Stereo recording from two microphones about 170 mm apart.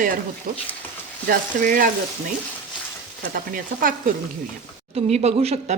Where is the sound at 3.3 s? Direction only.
55° right (ahead or behind).